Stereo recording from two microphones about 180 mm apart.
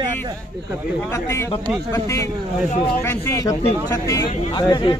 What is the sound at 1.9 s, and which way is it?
Speech, 20° left (ahead or behind).